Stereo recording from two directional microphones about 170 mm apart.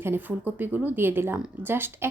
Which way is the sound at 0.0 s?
10° right (ahead or behind).